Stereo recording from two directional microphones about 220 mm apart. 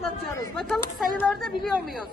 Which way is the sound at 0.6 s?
Centre (ahead or behind).